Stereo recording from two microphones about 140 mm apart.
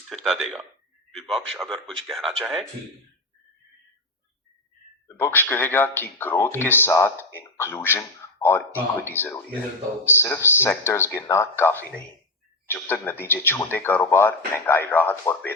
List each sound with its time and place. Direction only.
0.1 s speech: centre (ahead or behind)
1.6 s speech: 5° left (ahead or behind)
5.0 s speech: 20° left (ahead or behind)